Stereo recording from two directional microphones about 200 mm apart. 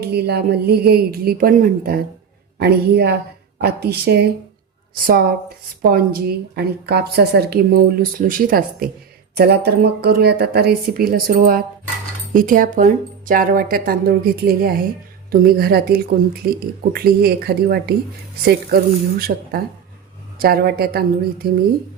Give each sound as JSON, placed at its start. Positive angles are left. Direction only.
{"t": 0.0, "sound": "a woman's voice", "side_deg": -55}